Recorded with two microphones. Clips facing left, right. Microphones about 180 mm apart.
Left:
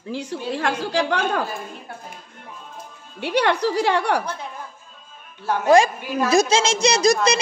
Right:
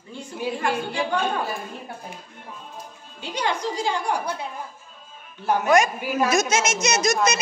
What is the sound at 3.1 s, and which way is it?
A woman's voice, 65° left (ahead or behind).